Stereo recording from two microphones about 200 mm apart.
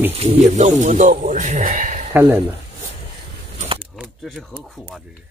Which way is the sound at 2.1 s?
10° right (ahead or behind).